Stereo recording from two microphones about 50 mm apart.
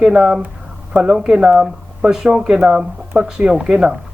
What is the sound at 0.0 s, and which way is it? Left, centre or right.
Speech, centre.